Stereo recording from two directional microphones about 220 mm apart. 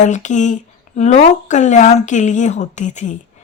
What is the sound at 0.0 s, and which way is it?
Speech, 35° left (ahead or behind).